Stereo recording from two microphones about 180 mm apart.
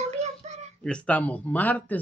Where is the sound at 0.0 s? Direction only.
40° right (ahead or behind).